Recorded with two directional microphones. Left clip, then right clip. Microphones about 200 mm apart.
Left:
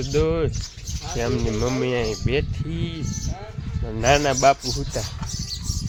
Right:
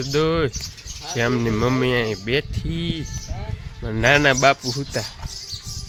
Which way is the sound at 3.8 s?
20° right (ahead or behind).